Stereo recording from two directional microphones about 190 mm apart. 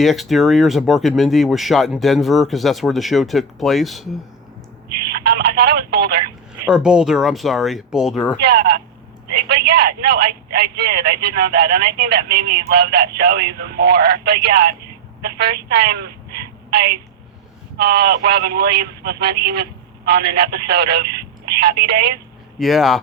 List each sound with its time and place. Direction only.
0.0 s speech: centre (ahead or behind)
5.0 s speech: 50° right (ahead or behind)
6.7 s speech: 5° right (ahead or behind)
8.4 s a woman's voice: 55° right (ahead or behind)
22.5 s speech: centre (ahead or behind)